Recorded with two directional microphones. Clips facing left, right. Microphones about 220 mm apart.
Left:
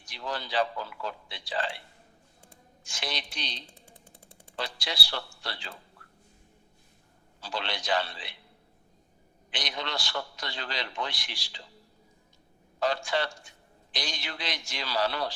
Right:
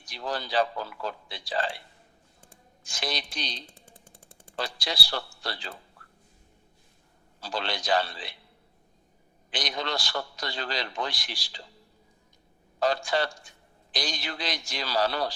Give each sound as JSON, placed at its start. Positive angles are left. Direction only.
{"t": 0.1, "sound": "a man's voice", "side_deg": -40}
{"t": 2.9, "sound": "a man's voice", "side_deg": -40}
{"t": 7.4, "sound": "a man's voice", "side_deg": -40}
{"t": 9.5, "sound": "a man's voice", "side_deg": -40}
{"t": 12.8, "sound": "a man's voice", "side_deg": -40}